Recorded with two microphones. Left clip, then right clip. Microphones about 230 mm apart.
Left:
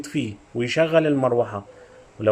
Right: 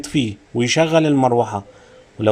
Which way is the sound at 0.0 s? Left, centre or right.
Right.